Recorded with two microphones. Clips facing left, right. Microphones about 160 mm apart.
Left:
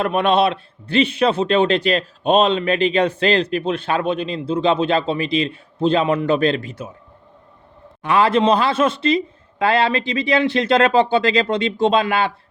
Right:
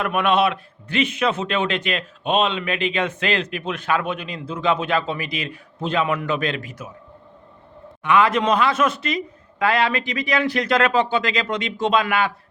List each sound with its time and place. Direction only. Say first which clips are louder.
0.0 s a man's voice: left 3 dB; 30° left (ahead or behind)
8.0 s a man's voice: left 2 dB; 35° left (ahead or behind)